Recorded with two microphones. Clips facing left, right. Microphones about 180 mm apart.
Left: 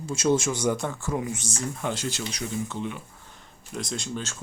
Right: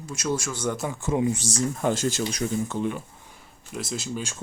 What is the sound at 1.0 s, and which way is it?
Speech, 20° right (ahead or behind).